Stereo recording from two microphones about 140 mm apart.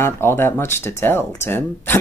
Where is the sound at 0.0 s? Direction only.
15° left (ahead or behind).